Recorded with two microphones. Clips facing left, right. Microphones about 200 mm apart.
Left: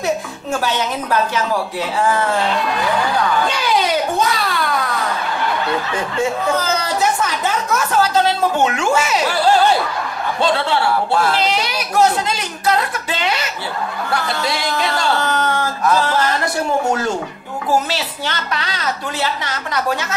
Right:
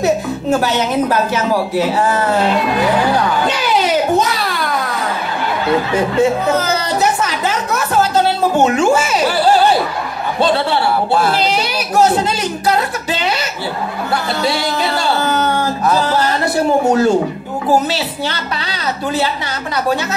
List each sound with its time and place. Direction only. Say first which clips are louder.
0.6 s a woman's voice: right 2 dB; 40° right (ahead or behind)
6.1 s speech: right 4 dB; 20° right (ahead or behind)
7.0 s a woman's voice: right 2 dB; 5° right (ahead or behind)
8.6 s a woman's voice: right 4 dB; 35° right (ahead or behind)
9.5 s speech: right 1 dB; 5° right (ahead or behind)
10.4 s a woman's voice: right 3 dB; 35° right (ahead or behind)
11.3 s a sound: right 2 dB; 35° right (ahead or behind)
14.5 s music: right 3 dB; 35° right (ahead or behind)
15.0 s a sound: right 3 dB; 10° right (ahead or behind)
16.0 s music: right 2 dB; 35° right (ahead or behind)
16.8 s a woman's voice: right 7 dB; 35° right (ahead or behind)